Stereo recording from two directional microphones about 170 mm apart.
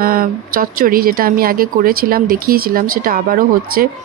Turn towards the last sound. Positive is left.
turn(degrees=-55)  # may be behind; listen again after turning